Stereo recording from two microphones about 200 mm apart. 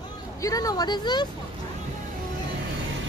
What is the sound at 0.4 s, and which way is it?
Speech, 15° left (ahead or behind).